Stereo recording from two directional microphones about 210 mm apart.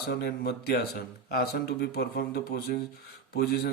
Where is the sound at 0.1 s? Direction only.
50° left (ahead or behind).